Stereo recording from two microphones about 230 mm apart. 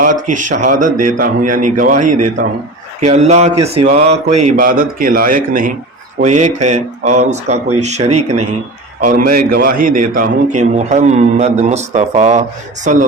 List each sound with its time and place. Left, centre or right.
0.0 s a man's voice: right
3.1 s a man's voice: right
9.2 s a man's voice: right